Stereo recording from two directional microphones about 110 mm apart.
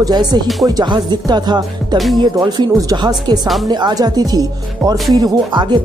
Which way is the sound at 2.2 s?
35° right (ahead or behind).